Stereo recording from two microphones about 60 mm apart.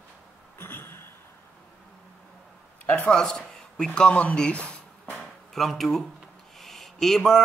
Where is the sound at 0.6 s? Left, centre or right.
Left.